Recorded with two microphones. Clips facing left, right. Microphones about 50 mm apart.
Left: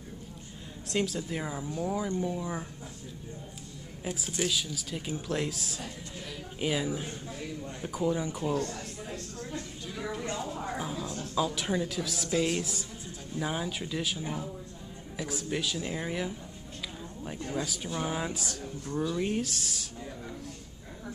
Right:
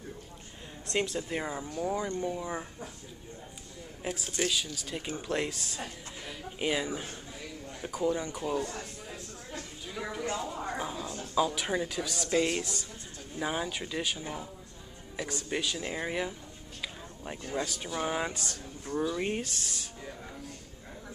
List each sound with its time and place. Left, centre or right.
0.9 s a woman's voice: centre
4.1 s a woman's voice: centre
8.4 s a sound: centre
10.3 s a woman's voice: centre
17.9 s speech: centre
18.3 s a woman's voice: centre
18.9 s speech: centre
19.4 s a woman's voice: centre